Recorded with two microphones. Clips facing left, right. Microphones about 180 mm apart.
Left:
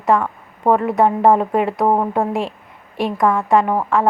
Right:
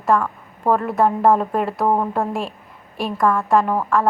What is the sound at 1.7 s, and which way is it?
Speech, 15° left (ahead or behind).